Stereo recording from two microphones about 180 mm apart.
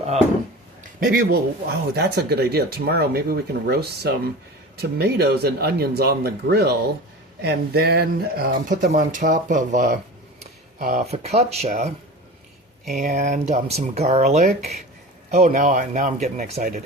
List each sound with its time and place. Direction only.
0.9 s speech: 55° right (ahead or behind)
8.9 s speech: 45° right (ahead or behind)
12.9 s speech: 45° right (ahead or behind)